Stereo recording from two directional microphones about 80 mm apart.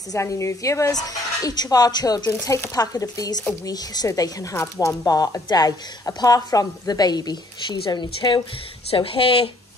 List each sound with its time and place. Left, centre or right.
0.1 s a woman's voice: left
8.9 s speech: left